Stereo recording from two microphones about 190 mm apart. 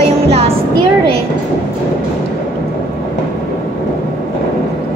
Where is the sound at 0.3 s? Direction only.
30° right (ahead or behind).